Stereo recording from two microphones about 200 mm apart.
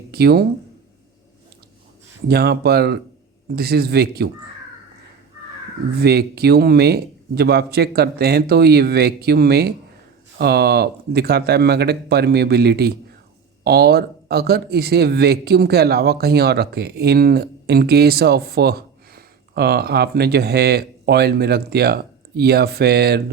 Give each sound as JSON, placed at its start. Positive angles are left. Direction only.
{"t": 0.1, "sound": "speech", "side_deg": -50}
{"t": 2.2, "sound": "speech", "side_deg": -50}
{"t": 6.0, "sound": "speech", "side_deg": -55}